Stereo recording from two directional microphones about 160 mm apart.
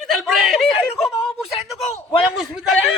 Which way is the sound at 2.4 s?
Centre (ahead or behind).